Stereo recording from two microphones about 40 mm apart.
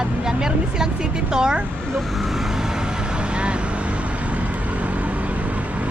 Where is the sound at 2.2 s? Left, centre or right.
Centre.